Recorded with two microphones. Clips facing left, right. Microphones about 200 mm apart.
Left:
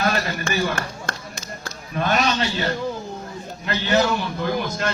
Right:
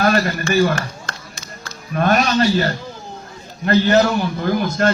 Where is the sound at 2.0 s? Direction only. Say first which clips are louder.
Right 5 dB; 50° right (ahead or behind).